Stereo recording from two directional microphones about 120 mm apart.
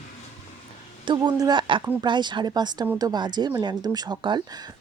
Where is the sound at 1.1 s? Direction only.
35° right (ahead or behind).